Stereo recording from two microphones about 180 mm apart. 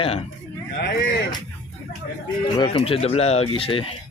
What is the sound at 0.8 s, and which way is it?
Speech, 60° left (ahead or behind).